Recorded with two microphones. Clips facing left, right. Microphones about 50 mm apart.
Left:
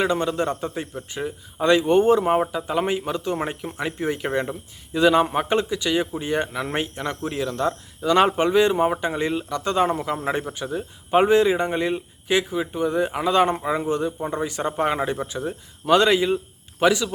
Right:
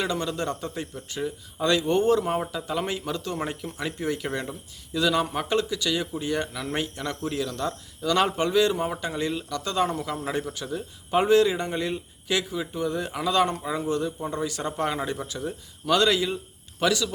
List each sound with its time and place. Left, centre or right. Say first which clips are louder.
0.0 s a man's voice: left 6 dB; left